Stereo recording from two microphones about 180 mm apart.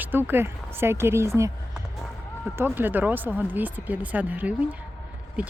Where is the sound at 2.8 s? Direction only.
10° right (ahead or behind).